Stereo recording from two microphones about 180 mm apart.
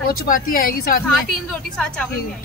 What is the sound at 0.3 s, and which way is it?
Speech, 50° left (ahead or behind).